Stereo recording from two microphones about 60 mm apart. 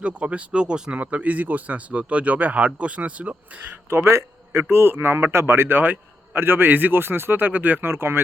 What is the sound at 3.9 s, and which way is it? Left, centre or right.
Speech, right.